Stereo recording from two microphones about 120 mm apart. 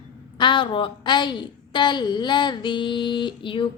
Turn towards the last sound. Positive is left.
turn(degrees=45)  # may be behind; listen again after turning